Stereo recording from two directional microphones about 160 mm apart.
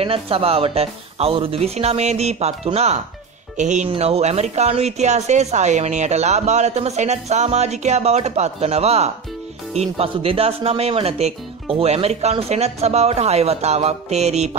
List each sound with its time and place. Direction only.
0.0 s speech: 35° right (ahead or behind)